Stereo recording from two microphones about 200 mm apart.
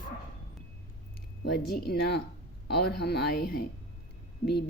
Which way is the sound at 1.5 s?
50° left (ahead or behind).